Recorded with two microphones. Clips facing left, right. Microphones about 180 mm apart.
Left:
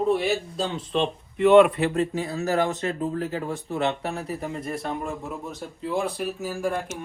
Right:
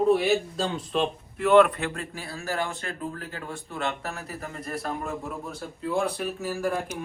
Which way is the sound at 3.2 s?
35° left (ahead or behind).